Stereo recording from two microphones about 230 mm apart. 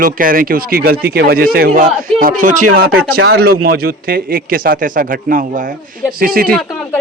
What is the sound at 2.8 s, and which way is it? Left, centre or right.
A man's voice, right.